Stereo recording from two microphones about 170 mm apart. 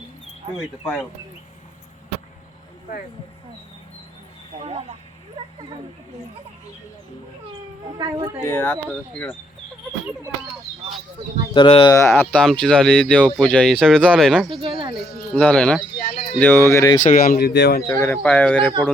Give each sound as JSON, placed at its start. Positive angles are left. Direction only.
{"t": 4.6, "sound": "speech", "side_deg": -30}
{"t": 7.9, "sound": "speech", "side_deg": -25}
{"t": 8.4, "sound": "speech", "side_deg": 15}
{"t": 11.5, "sound": "speech", "side_deg": 30}
{"t": 11.9, "sound": "speech", "side_deg": 15}
{"t": 12.3, "sound": "speech", "side_deg": 5}
{"t": 14.6, "sound": "speech", "side_deg": -30}
{"t": 15.4, "sound": "speech", "side_deg": 5}
{"t": 16.0, "sound": "a sound", "side_deg": 45}
{"t": 16.4, "sound": "speech", "side_deg": 15}
{"t": 17.0, "sound": "speech", "side_deg": 50}
{"t": 18.0, "sound": "speech", "side_deg": 10}